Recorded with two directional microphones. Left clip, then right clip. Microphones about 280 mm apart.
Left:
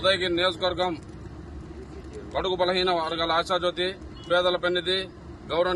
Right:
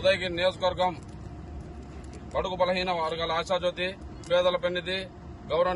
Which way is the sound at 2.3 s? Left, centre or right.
Centre.